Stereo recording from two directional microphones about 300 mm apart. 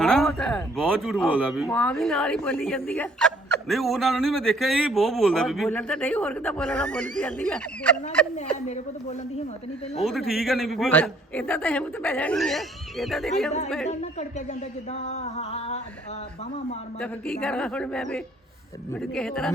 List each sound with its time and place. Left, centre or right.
0.0 s speech: centre
10.0 s speech: centre
14.0 s a sound: left
17.4 s speech: centre